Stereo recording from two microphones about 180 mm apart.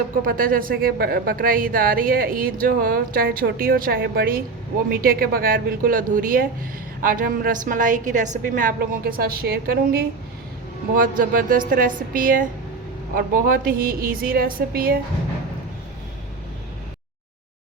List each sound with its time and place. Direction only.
0.3 s a woman's voice: 50° right (ahead or behind)